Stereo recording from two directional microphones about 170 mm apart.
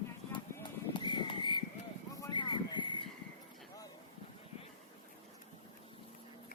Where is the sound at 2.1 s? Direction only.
25° left (ahead or behind).